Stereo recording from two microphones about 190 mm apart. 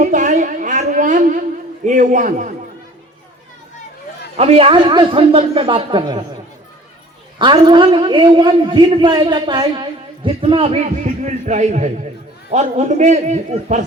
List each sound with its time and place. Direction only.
0.0 s a sound: 40° right (ahead or behind)
4.4 s a man's voice: 30° right (ahead or behind)
7.3 s a man's voice: 25° right (ahead or behind)